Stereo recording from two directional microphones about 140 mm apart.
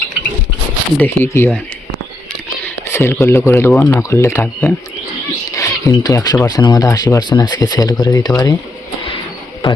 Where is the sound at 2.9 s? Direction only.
20° left (ahead or behind).